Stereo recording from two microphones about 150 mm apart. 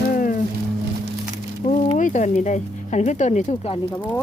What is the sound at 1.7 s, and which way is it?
Speech, 55° left (ahead or behind).